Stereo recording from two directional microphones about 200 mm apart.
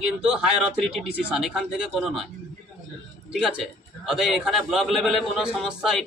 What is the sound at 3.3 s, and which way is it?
A man's voice, centre (ahead or behind).